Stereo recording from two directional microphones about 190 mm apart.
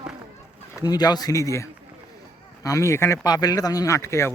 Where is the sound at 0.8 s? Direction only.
20° left (ahead or behind).